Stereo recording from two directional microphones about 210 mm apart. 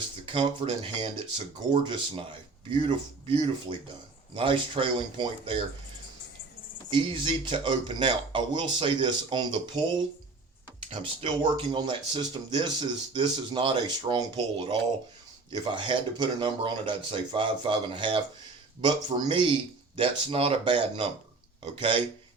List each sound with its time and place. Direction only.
0.3 s speech: 25° right (ahead or behind)
6.9 s speech: 25° right (ahead or behind)